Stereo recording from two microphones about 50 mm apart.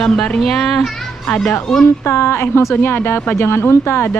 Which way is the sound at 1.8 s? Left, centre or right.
Left.